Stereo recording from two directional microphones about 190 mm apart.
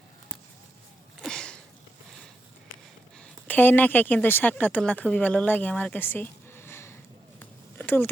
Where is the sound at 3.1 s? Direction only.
5° left (ahead or behind).